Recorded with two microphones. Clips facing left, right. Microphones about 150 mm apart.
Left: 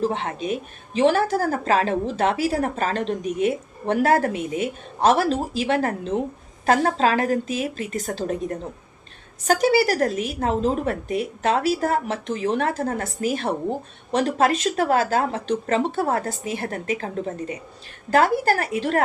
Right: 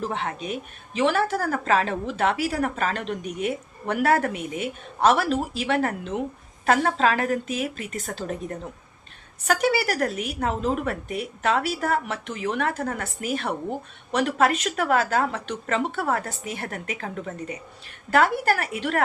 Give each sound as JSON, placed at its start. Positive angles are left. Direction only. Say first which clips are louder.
{"t": 0.0, "sound": "a woman's voice", "louder": "left 4 dB", "side_deg": 30}